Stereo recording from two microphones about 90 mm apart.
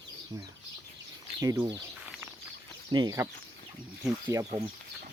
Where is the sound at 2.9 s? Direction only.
55° right (ahead or behind).